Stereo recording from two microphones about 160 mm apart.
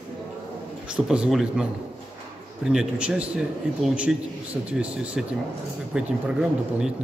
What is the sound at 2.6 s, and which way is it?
Speech, 5° right (ahead or behind).